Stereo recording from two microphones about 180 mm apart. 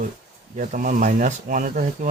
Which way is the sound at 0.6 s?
50° right (ahead or behind).